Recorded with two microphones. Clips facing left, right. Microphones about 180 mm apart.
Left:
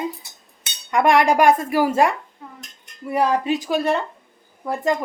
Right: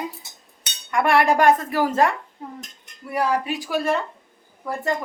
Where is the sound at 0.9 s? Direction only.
15° left (ahead or behind).